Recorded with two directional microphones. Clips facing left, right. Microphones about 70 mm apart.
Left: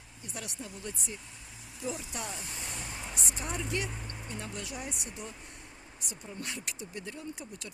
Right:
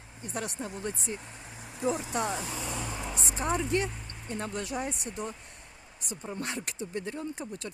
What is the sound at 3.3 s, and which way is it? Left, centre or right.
Speech, right.